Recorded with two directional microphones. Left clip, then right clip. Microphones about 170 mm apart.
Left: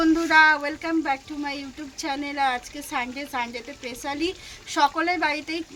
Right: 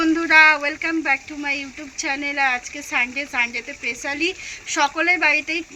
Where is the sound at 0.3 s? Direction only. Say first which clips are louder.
Right 5 dB; 20° left (ahead or behind).